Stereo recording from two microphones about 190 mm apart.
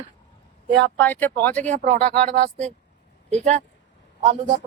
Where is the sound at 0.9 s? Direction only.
10° left (ahead or behind).